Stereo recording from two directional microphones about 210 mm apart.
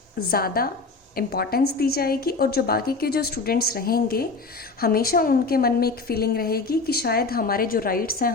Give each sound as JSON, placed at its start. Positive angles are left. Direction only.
{"t": 0.3, "sound": "a woman's voice", "side_deg": 45}